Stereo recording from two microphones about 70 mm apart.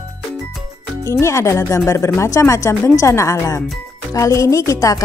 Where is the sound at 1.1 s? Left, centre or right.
Left.